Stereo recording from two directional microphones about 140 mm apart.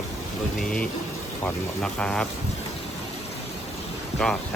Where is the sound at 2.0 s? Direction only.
5° left (ahead or behind).